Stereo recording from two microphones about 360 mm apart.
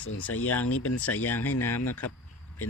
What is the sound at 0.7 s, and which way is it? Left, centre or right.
Speech, left.